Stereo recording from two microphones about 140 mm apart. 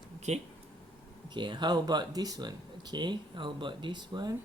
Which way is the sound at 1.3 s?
35° right (ahead or behind).